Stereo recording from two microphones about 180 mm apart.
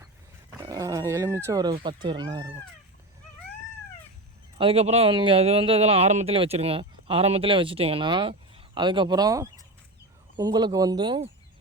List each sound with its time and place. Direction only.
0.6 s wild animals: 20° right (ahead or behind)
1.7 s speech: 25° right (ahead or behind)
4.5 s a man's voice: 30° right (ahead or behind)